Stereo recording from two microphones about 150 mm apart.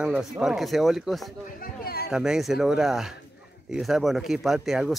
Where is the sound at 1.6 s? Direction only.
85° left.